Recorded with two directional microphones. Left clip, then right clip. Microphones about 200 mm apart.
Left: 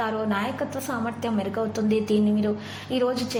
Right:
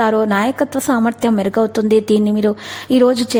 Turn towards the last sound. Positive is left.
turn(degrees=-40)  # may be behind; listen again after turning